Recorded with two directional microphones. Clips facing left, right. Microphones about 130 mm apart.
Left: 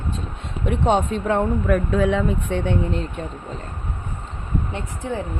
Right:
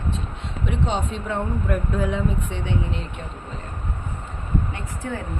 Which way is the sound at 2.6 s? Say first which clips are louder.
Left 5 dB; 50° left (ahead or behind).